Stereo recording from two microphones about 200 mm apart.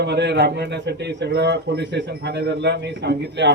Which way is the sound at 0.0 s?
60° right (ahead or behind).